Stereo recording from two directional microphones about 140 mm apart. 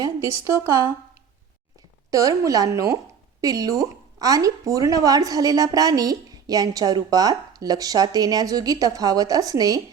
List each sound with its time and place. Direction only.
0.0 s a woman's voice: 20° right (ahead or behind)
2.0 s a woman's voice: 25° right (ahead or behind)